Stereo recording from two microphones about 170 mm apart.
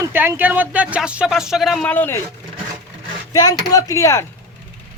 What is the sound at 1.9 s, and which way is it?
Speech, 10° left (ahead or behind).